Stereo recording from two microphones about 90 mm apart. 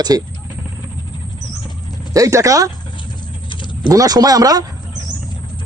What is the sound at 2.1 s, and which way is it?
Speech, 35° right (ahead or behind).